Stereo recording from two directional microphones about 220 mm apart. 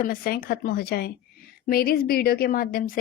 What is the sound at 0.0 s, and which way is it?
A woman's voice, 40° left (ahead or behind).